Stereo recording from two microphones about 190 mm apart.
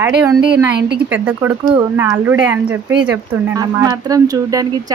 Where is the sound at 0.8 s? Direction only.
60° right (ahead or behind).